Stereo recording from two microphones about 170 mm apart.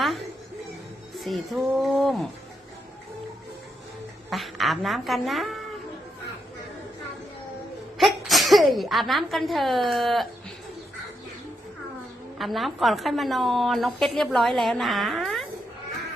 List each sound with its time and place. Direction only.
1.1 s a woman's voice: centre (ahead or behind)
4.3 s a woman's voice: centre (ahead or behind)
7.9 s speech: centre (ahead or behind)
12.4 s a woman's voice: centre (ahead or behind)